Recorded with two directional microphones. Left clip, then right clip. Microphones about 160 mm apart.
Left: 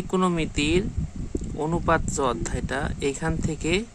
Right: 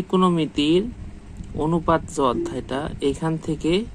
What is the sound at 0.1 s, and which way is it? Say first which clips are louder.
Speech: right 4 dB; 15° left (ahead or behind).